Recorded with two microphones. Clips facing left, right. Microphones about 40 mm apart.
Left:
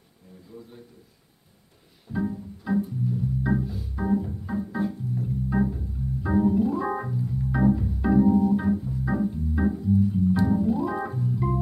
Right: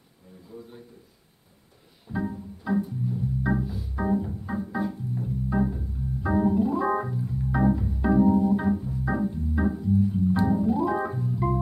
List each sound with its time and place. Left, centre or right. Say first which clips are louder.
0.5 s a sound: right 1 dB; centre
2.0 s organ: left 2 dB; centre
7.5 s organ: left 1 dB; centre